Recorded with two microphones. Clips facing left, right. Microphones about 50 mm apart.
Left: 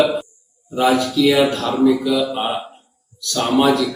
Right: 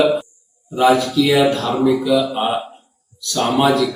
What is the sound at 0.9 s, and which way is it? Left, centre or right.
A man's voice, centre.